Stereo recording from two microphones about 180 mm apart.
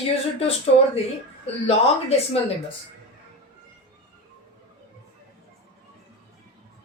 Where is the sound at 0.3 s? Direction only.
35° left (ahead or behind).